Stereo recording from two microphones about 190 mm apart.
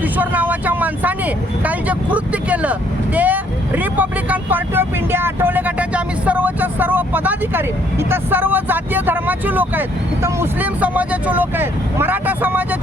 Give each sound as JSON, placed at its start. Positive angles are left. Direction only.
{"t": 0.2, "sound": "vehicle", "side_deg": -10}
{"t": 1.6, "sound": "speech", "side_deg": -10}
{"t": 3.2, "sound": "vehicle", "side_deg": -10}
{"t": 10.2, "sound": "speech", "side_deg": -10}